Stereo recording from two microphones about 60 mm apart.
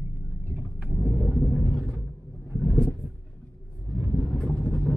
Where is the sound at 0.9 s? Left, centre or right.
Right.